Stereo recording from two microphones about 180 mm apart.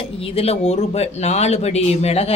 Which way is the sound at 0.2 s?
35° left (ahead or behind).